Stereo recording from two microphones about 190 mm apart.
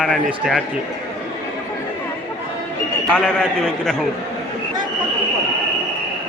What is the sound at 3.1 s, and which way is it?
Speech, 5° left (ahead or behind).